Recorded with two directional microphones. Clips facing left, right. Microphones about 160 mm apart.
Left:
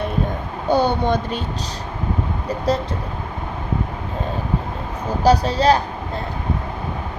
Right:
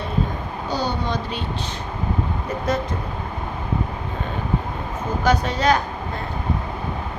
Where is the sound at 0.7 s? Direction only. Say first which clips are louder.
Left 7 dB; 55° left (ahead or behind).